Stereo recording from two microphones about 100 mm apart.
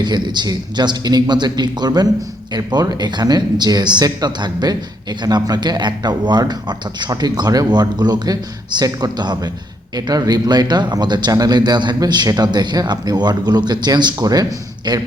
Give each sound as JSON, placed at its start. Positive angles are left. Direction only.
{"t": 0.0, "sound": "speech", "side_deg": -45}